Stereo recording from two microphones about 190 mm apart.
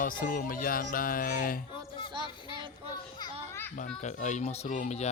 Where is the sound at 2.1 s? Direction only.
25° right (ahead or behind).